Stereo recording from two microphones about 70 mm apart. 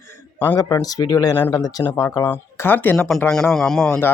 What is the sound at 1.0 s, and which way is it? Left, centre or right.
Speech, left.